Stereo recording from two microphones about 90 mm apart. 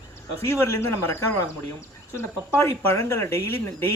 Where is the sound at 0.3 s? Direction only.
30° left (ahead or behind).